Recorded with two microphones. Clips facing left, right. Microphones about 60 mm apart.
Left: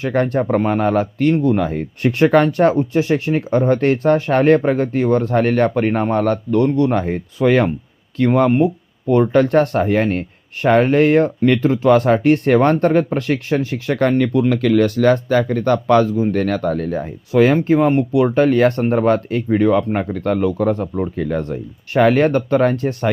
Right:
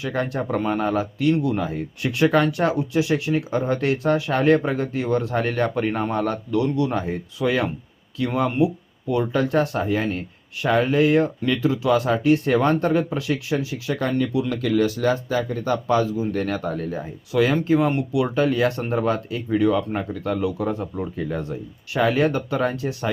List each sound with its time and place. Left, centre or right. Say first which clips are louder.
0.0 s speech: left 7 dB; left
1.5 s speech: left 6 dB; left
16.0 s speech: left 6 dB; left
17.3 s speech: left 6 dB; left